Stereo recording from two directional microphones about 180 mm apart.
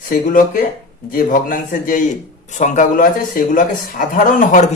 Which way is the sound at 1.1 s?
50° left (ahead or behind).